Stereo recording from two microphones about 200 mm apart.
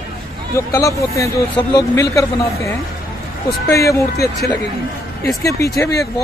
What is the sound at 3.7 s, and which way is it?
Speech, 15° left (ahead or behind).